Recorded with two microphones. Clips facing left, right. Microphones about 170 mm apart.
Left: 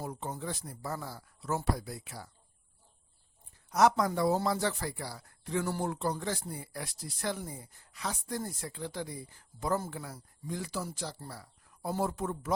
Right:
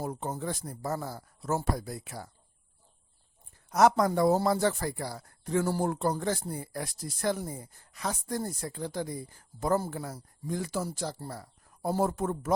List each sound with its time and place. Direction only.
0.0 s speech: 45° right (ahead or behind)
3.7 s speech: 50° right (ahead or behind)